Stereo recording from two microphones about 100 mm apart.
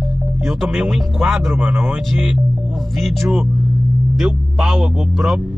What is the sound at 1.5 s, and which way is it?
Speech, 20° right (ahead or behind).